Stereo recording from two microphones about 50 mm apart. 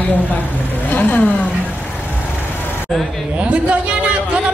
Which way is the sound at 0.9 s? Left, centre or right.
Left.